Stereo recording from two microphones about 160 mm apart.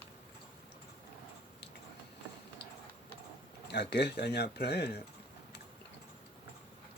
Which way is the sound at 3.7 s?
90° left.